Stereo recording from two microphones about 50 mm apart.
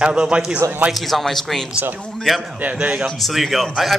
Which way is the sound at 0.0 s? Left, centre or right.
Right.